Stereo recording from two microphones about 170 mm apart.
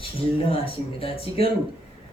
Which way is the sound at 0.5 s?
35° left (ahead or behind).